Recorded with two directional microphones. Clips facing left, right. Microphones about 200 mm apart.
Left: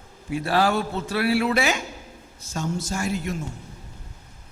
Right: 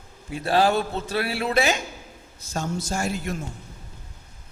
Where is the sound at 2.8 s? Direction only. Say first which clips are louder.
Right 1 dB; 45° right (ahead or behind).